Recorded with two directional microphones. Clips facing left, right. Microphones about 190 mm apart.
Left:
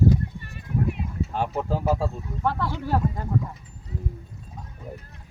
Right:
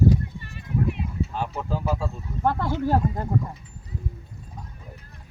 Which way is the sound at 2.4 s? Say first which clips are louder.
Right 3 dB; 50° right (ahead or behind).